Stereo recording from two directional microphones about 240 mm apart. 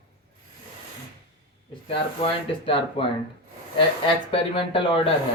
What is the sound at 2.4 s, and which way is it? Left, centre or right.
Mantra, left.